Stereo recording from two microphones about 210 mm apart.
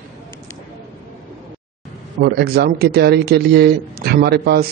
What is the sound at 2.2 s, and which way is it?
Speech, 50° right (ahead or behind).